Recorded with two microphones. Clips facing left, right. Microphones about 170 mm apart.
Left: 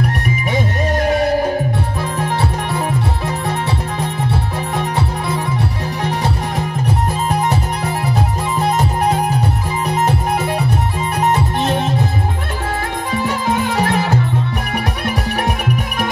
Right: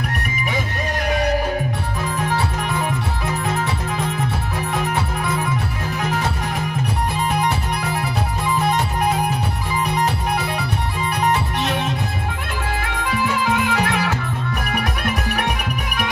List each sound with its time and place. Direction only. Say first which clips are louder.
1.0 s music: left 4 dB; 40° left (ahead or behind)
6.0 s music: left 3 dB; 35° left (ahead or behind)
13.1 s music: left 2 dB; 35° left (ahead or behind)